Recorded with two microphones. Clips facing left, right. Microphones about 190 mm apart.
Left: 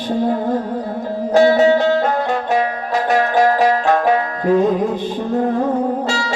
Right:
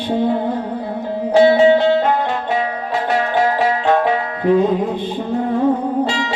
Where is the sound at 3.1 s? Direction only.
45° left (ahead or behind).